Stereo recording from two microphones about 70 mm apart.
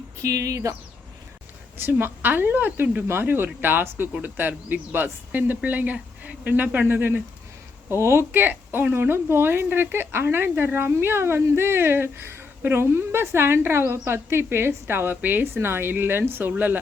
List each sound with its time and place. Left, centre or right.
0.2 s speech: right
1.8 s a woman's voice: right
8.3 s a woman's voice: right